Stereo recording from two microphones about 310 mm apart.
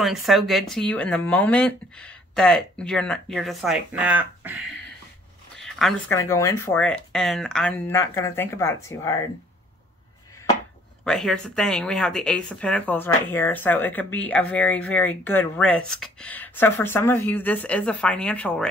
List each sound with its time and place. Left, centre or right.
0.0 s speech: centre
11.1 s speech: centre